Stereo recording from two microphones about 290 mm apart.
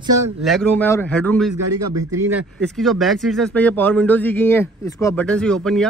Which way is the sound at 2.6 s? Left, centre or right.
Centre.